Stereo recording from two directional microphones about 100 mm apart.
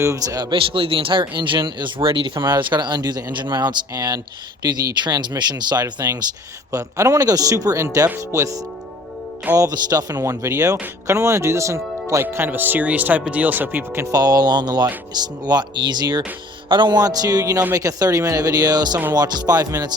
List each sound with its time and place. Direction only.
0.0 s speech: 30° right (ahead or behind)
0.5 s speech: 60° right (ahead or behind); by 6.1 s 45° right (ahead or behind)
6.7 s speech: 30° right (ahead or behind)
14.1 s speech: 40° right (ahead or behind)